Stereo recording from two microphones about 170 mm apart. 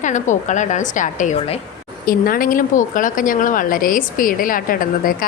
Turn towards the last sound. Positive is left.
turn(degrees=55)  # may be behind; listen again after turning